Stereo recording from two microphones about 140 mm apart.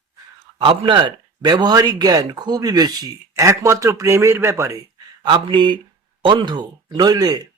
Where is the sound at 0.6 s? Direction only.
35° right (ahead or behind); by 4.8 s 20° right (ahead or behind).